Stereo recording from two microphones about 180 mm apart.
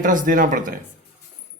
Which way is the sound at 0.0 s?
50° right (ahead or behind).